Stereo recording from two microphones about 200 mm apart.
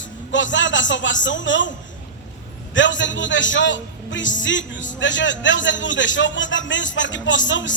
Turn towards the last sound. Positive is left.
turn(degrees=65)  # may be behind; listen again after turning